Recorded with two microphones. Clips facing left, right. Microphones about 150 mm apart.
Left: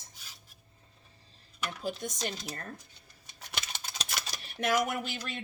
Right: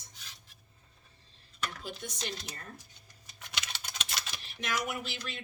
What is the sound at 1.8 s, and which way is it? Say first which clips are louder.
Speech: left 6 dB; 45° left (ahead or behind).